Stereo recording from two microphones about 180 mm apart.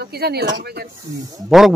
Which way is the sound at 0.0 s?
60° right (ahead or behind).